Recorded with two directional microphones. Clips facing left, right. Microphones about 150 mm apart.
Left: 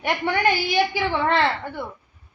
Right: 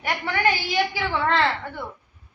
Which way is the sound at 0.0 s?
20° left (ahead or behind).